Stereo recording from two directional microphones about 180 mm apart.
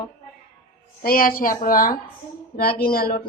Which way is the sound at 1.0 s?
55° left (ahead or behind).